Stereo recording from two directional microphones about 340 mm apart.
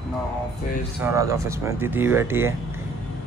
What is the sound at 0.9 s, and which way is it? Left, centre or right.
Speech, centre.